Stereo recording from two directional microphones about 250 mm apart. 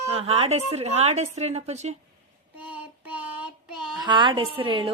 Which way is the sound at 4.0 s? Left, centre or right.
Centre.